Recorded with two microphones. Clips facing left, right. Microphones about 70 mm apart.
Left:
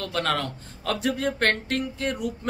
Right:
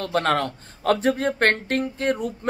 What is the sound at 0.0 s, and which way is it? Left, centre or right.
Speech, right.